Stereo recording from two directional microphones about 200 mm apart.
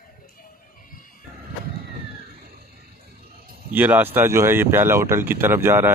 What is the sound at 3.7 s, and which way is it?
Speech, 10° right (ahead or behind).